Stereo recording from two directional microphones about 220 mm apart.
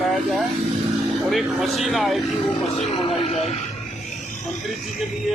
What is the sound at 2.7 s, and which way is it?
Speech, 25° left (ahead or behind).